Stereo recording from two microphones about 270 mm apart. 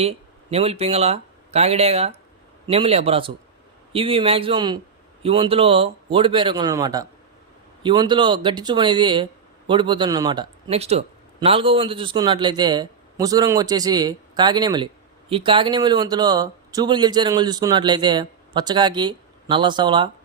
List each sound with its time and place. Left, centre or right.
0.5 s speech: right